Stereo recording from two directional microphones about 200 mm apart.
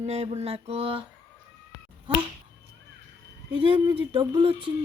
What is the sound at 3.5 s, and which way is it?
Speech, 25° right (ahead or behind).